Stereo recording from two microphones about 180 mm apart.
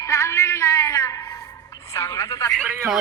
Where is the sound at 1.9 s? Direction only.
15° left (ahead or behind).